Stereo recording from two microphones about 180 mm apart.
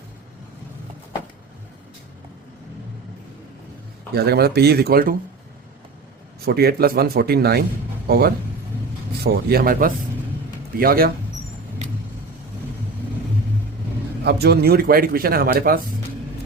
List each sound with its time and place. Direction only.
4.1 s speech: 60° right (ahead or behind)
6.4 s speech: 60° right (ahead or behind)
14.3 s speech: 65° right (ahead or behind)